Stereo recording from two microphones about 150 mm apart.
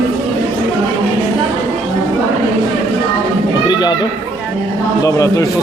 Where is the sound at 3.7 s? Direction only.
30° left (ahead or behind).